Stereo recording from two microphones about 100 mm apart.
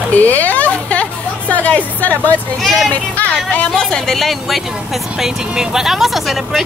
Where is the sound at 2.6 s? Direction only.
Centre (ahead or behind).